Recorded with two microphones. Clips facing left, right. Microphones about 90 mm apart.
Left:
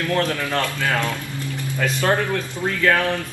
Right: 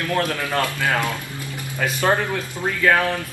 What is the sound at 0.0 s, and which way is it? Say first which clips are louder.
Speech: left 1 dB; 15° right (ahead or behind).